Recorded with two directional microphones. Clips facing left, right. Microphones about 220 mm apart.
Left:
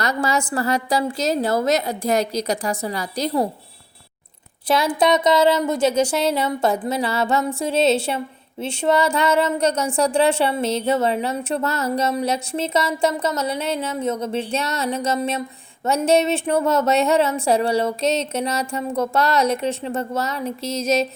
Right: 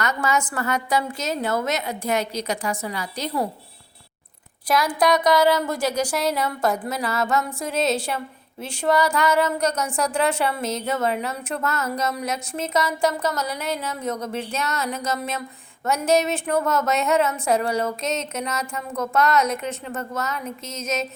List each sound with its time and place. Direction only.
0.0 s a woman's voice: 35° left (ahead or behind)
4.9 s speech: 25° left (ahead or behind)